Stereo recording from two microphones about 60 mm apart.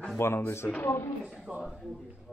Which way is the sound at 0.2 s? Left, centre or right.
Left.